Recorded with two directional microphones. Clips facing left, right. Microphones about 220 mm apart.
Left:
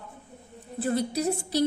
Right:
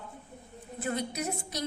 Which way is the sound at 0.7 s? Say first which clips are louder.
Left 6 dB; 35° left (ahead or behind).